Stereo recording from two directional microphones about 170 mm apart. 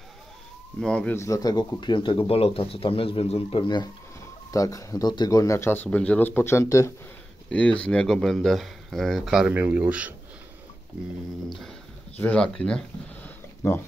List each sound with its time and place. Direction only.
0.7 s speech: 5° left (ahead or behind)
7.4 s speech: 5° left (ahead or behind)
12.2 s speech: 5° left (ahead or behind)